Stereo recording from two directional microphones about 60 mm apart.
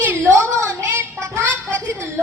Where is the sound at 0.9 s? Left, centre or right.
Right.